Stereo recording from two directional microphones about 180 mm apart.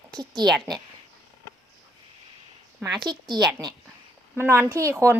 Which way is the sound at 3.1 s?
25° right (ahead or behind).